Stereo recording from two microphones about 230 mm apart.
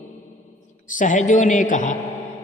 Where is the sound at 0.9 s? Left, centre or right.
Left.